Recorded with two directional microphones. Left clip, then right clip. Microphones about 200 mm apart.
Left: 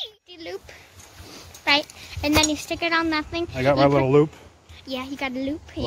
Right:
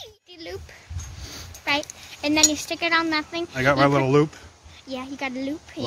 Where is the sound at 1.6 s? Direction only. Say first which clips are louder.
Left 4 dB; 15° left (ahead or behind).